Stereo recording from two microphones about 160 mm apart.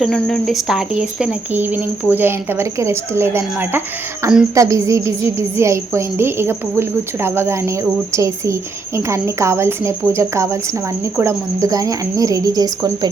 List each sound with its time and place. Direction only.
0.0 s a woman's voice: centre (ahead or behind); by 13.1 s 25° right (ahead or behind)